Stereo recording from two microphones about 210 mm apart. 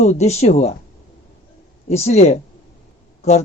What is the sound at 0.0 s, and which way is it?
Speech, 30° left (ahead or behind).